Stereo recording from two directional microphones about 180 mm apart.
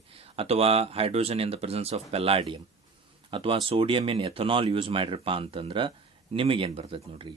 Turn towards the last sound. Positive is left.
turn(degrees=-30)  # may be behind; listen again after turning